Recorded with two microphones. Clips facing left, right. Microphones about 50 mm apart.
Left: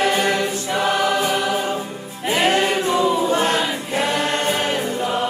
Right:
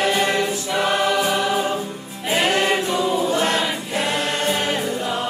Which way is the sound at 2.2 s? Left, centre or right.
Left.